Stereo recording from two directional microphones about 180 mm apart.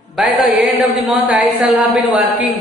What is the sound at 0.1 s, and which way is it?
Chant, 5° right (ahead or behind).